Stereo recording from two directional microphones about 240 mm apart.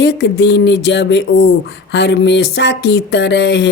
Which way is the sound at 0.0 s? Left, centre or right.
Left.